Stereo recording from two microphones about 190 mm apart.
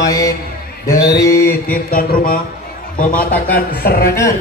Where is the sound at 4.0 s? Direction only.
15° left (ahead or behind).